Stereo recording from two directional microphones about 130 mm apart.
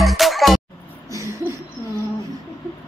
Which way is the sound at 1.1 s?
25° right (ahead or behind).